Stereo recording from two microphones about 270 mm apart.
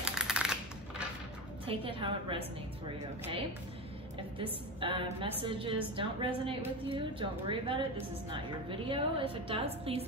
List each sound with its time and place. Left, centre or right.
0.1 s a sound: centre
1.7 s a woman's voice: centre
4.4 s a woman's voice: centre